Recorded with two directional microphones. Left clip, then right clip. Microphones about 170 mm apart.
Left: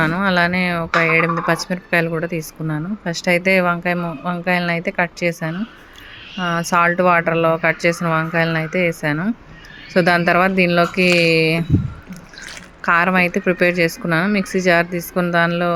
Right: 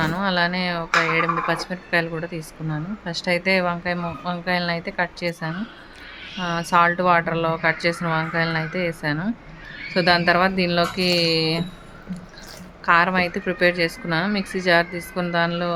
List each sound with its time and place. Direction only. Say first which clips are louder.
0.0 s speech: left 5 dB; 15° left (ahead or behind)
12.8 s speech: left 3 dB; 20° left (ahead or behind)